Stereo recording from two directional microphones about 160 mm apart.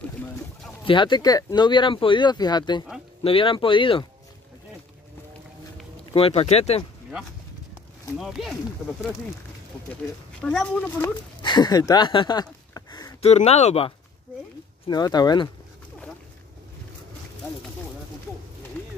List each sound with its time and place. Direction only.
0.8 s speech: 30° left (ahead or behind)
6.1 s speech: 40° left (ahead or behind)
8.2 s speech: centre (ahead or behind)
10.4 s speech: 5° left (ahead or behind)
11.0 s speech: 25° left (ahead or behind)
12.7 s a sound: 25° left (ahead or behind)
13.2 s speech: 45° left (ahead or behind)
14.9 s speech: 25° left (ahead or behind)